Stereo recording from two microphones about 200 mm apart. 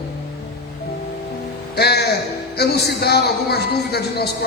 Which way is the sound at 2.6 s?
55° left (ahead or behind).